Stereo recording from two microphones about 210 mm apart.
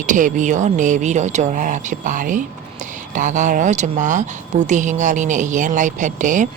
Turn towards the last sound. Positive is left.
turn(degrees=-35)  # may be behind; listen again after turning